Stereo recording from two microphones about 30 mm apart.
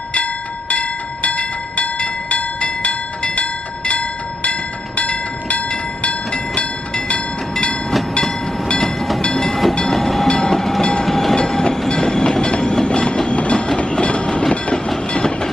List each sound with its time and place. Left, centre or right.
0.1 s train: left
6.3 s train: left
8.8 s train: centre
10.2 s train: centre
10.8 s train: left
11.1 s train: centre
11.3 s train: left
13.3 s music: left
14.2 s train: left